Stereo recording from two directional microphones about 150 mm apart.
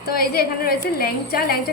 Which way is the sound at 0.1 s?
85° left.